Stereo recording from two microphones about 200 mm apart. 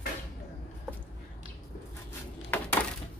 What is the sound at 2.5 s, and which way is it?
Coin, 10° left (ahead or behind).